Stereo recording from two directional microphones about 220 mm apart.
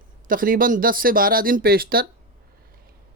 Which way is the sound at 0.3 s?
40° right (ahead or behind).